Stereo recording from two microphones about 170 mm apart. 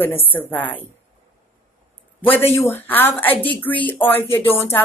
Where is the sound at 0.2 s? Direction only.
10° left (ahead or behind).